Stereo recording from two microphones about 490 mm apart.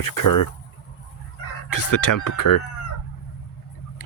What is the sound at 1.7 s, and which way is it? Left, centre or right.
Speech, left.